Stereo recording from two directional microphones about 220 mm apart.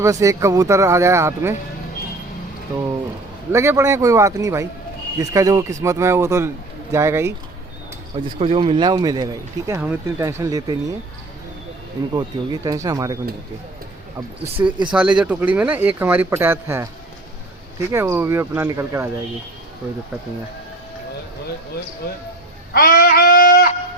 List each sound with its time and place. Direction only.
0.0 s speech: 15° right (ahead or behind)
3.5 s speech: 10° right (ahead or behind)
8.1 s speech: 25° right (ahead or behind)
12.1 s speech: 20° right (ahead or behind)
14.6 s speech: 15° right (ahead or behind)
22.0 s speech: 45° left (ahead or behind)
22.7 s a sound: 40° left (ahead or behind)